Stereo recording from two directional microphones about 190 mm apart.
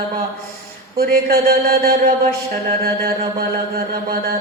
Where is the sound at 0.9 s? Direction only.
50° right (ahead or behind).